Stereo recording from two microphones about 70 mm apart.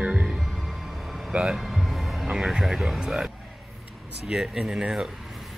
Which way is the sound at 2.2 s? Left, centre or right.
Centre.